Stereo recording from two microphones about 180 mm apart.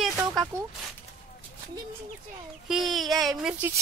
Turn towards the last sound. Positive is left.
turn(degrees=0)  # may be behind; listen again after turning